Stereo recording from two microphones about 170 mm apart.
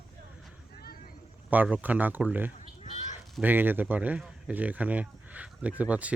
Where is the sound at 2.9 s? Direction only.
45° left (ahead or behind).